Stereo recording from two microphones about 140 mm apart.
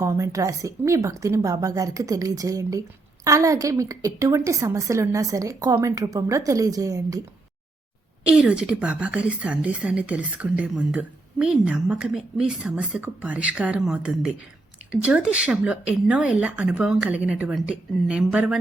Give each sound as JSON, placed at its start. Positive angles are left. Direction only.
{"t": 0.0, "sound": "a woman's voice", "side_deg": -25}
{"t": 8.3, "sound": "a woman's voice", "side_deg": -5}